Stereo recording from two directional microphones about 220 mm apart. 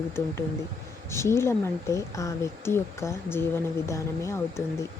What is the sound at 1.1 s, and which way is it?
Speech, 10° left (ahead or behind).